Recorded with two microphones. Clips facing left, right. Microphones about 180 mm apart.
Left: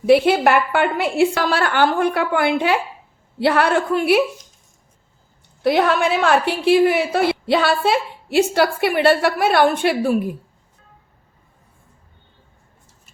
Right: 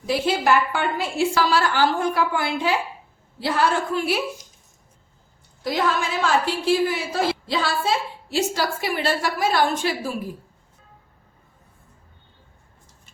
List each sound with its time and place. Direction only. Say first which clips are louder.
0.0 s a woman's voice: left 8 dB; 60° left (ahead or behind)
5.6 s a woman's voice: left 7 dB; 65° left (ahead or behind)